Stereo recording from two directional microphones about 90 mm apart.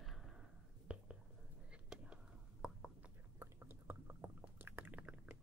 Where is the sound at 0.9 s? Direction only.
10° right (ahead or behind).